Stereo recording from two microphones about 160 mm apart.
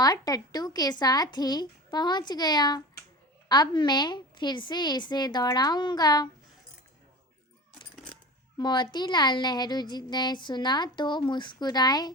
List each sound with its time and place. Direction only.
0.0 s speech: 25° left (ahead or behind)
8.5 s speech: 25° left (ahead or behind)